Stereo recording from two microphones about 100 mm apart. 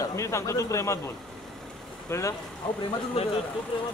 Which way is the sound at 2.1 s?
30° left (ahead or behind).